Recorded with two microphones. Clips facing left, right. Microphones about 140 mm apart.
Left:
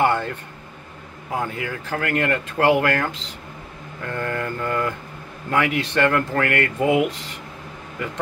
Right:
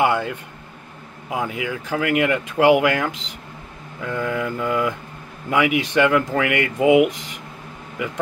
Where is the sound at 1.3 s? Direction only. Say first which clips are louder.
Right 1 dB; 10° right (ahead or behind).